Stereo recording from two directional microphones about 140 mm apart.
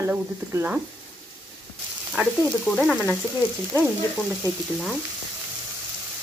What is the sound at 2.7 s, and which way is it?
Frying, 5° left (ahead or behind).